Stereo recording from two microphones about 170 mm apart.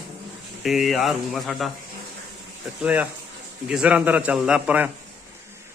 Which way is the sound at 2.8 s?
10° right (ahead or behind).